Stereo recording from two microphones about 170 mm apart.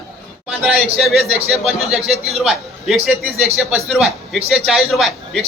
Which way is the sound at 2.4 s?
Centre (ahead or behind).